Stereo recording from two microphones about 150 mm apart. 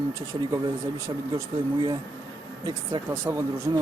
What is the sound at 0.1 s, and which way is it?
Speech, 20° right (ahead or behind).